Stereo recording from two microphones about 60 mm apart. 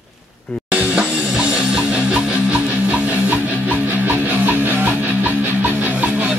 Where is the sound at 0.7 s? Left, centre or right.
Right.